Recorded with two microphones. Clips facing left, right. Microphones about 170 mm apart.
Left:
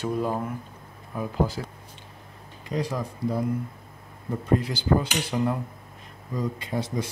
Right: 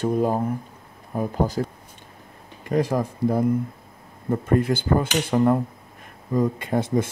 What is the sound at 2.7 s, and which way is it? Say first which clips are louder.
Speech: right 7 dB; 50° right (ahead or behind).